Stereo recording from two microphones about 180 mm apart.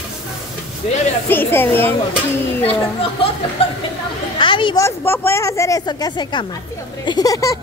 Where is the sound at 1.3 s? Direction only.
10° left (ahead or behind).